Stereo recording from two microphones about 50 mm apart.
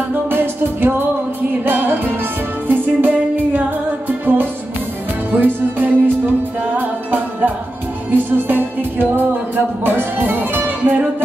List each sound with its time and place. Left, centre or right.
0.1 s music: right
2.7 s music: right